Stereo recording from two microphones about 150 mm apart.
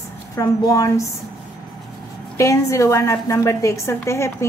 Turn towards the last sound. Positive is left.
turn(degrees=20)  # may be behind; listen again after turning